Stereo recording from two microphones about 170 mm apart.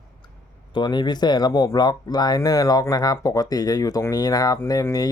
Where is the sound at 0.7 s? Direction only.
25° left (ahead or behind).